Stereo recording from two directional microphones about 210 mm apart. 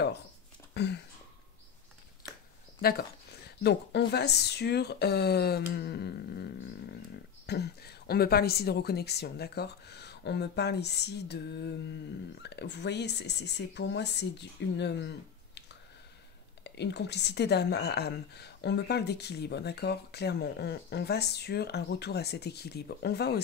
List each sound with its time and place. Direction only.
0.7 s speech: 55° left (ahead or behind)
2.8 s speech: 45° left (ahead or behind)
16.6 s speech: 55° left (ahead or behind)